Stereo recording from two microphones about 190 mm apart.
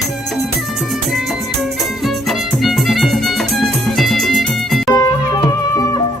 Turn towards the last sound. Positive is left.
turn(degrees=20)  # may be behind; listen again after turning